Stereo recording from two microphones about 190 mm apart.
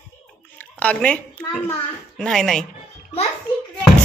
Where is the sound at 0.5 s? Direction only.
5° left (ahead or behind).